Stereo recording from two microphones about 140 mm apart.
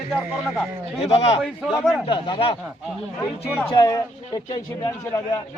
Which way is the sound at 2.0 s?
35° left (ahead or behind).